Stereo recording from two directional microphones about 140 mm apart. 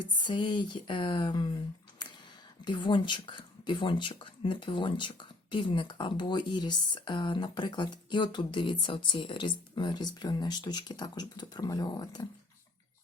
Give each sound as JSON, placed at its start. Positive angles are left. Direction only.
{"t": 0.3, "sound": "speech", "side_deg": 35}
{"t": 2.0, "sound": "a sound", "side_deg": 30}
{"t": 2.6, "sound": "speech", "side_deg": 35}